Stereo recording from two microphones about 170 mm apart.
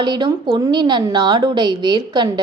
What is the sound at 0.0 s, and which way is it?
Speech, 25° right (ahead or behind).